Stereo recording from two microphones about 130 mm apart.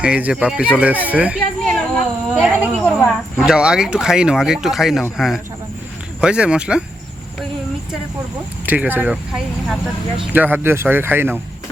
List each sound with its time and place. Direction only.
0.0 s speech: 10° right (ahead or behind)
1.6 s a sound: 5° left (ahead or behind)
3.3 s speech: 5° right (ahead or behind)
8.6 s speech: 15° right (ahead or behind)